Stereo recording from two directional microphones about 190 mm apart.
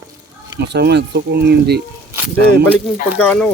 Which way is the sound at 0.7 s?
60° right (ahead or behind).